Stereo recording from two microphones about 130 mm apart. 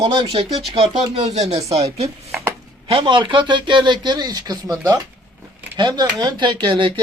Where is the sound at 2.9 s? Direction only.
40° right (ahead or behind).